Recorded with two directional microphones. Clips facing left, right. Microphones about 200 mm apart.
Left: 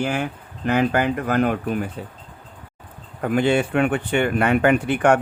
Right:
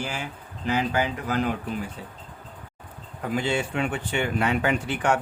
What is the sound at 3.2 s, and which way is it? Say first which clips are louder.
Speech: left 7 dB; 60° left (ahead or behind).